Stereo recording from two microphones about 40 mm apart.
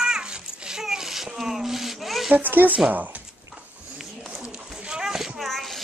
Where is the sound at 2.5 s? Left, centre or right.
Right.